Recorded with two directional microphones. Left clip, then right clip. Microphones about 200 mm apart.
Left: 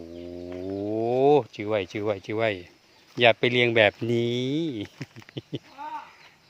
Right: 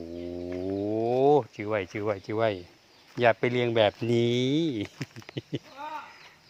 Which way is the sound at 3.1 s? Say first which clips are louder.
Left 4 dB; 20° left (ahead or behind).